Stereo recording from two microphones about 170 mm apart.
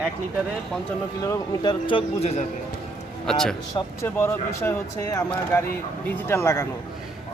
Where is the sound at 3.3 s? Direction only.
5° left (ahead or behind).